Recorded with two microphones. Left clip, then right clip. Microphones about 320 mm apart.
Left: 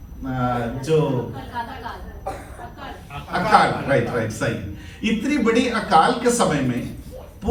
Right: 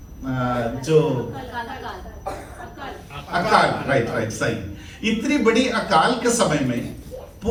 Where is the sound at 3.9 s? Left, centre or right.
Right.